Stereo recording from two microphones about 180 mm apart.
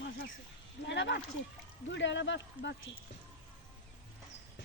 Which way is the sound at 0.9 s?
80° left.